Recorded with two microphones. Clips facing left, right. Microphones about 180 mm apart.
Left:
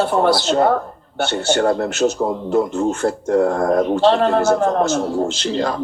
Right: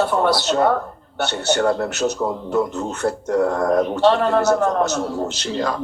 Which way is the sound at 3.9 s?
30° left (ahead or behind).